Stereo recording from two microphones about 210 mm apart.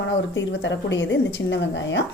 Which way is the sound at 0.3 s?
60° left (ahead or behind).